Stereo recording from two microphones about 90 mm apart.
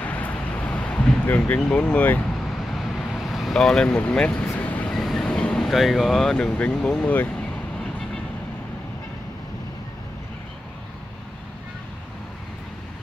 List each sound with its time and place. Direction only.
0.0 s a sound: 15° left (ahead or behind)
1.6 s speech: 10° left (ahead or behind)
2.7 s vehicle: centre (ahead or behind); by 4.9 s 20° left (ahead or behind)
4.9 s train: 5° left (ahead or behind)
5.7 s speech: centre (ahead or behind)
6.3 s speech: 10° left (ahead or behind)